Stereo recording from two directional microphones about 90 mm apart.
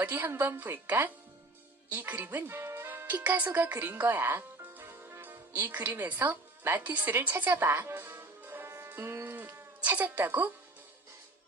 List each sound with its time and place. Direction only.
0.0 s a woman's voice: 20° right (ahead or behind)
4.0 s music: 20° right (ahead or behind)